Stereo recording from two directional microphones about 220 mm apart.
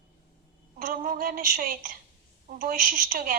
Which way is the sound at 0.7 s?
40° right (ahead or behind).